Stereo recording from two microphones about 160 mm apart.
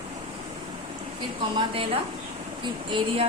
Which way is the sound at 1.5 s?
35° right (ahead or behind).